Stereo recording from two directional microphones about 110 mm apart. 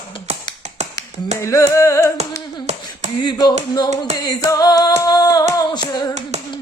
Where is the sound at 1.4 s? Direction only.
30° left (ahead or behind).